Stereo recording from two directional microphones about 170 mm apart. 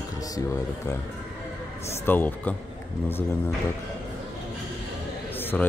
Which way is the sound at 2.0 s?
10° left (ahead or behind).